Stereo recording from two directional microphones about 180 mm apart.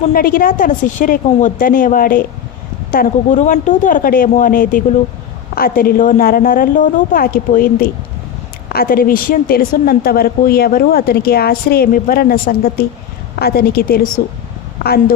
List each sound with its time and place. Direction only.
0.0 s a woman's voice: 50° left (ahead or behind)